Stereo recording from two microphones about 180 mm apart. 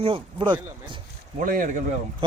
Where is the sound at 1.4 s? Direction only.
50° right (ahead or behind).